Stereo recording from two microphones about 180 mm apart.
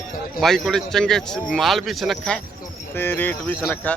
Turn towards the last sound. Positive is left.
turn(degrees=10)  # may be behind; listen again after turning